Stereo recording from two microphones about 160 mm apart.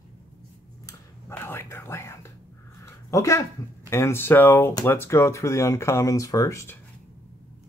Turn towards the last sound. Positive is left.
turn(degrees=20)  # may be behind; listen again after turning